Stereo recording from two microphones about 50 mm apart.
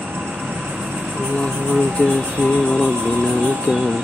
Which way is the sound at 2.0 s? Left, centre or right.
Left.